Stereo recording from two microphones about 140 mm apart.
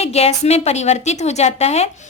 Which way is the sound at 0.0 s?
50° left (ahead or behind).